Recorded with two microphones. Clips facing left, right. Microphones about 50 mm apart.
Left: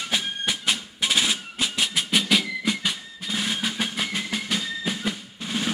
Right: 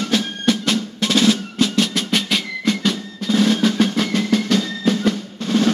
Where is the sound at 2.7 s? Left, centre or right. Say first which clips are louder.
Right 7 dB; centre.